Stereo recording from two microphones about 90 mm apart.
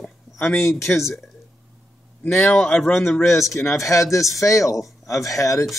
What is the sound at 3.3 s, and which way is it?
Speech, 35° left (ahead or behind).